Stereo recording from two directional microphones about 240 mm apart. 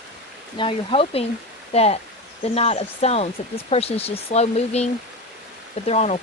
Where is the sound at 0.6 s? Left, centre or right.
Left.